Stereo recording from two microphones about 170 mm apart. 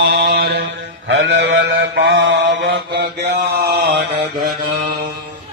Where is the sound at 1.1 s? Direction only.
90° right; by 4.0 s 70° right (ahead or behind).